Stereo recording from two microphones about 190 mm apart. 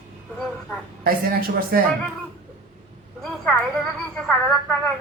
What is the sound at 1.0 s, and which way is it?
Speech, 50° right (ahead or behind).